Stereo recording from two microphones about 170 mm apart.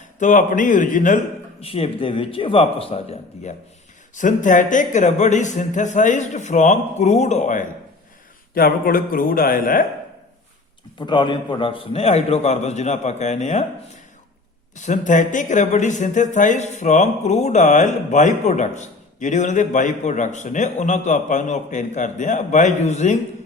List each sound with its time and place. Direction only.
0.2 s speech: 50° left (ahead or behind)
1.6 s a man's voice: 35° left (ahead or behind)
4.1 s speech: 50° left (ahead or behind)
8.5 s speech: 60° left (ahead or behind)
11.0 s a man's voice: 25° left (ahead or behind); by 13.7 s 40° left (ahead or behind)
14.8 s speech: 45° left (ahead or behind)